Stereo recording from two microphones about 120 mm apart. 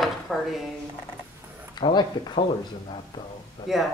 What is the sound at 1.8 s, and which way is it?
Speech, 40° left (ahead or behind).